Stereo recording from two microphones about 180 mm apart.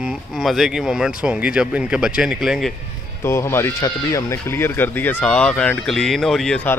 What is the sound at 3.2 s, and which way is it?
Speech, 15° left (ahead or behind).